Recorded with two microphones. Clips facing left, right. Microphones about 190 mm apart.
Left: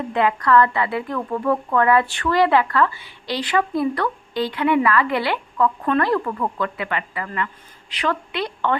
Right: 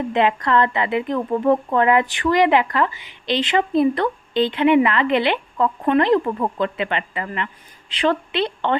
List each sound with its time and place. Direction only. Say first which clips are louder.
0.1 s a woman's voice: left 2 dB; 20° right (ahead or behind)